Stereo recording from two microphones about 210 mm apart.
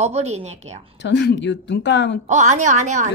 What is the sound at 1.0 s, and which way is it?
Speech, 55° left (ahead or behind).